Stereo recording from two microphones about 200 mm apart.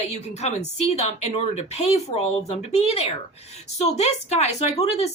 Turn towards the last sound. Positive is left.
turn(degrees=30)  # may be behind; listen again after turning